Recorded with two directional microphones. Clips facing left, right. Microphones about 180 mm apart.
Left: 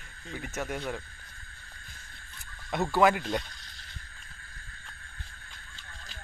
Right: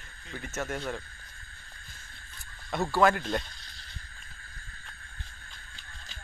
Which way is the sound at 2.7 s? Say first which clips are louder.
Left 1 dB; 20° left (ahead or behind).